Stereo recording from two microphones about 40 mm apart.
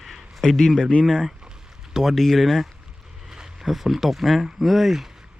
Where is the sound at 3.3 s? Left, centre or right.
Centre.